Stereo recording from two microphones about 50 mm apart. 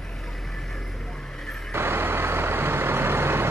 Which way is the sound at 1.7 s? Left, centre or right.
Right.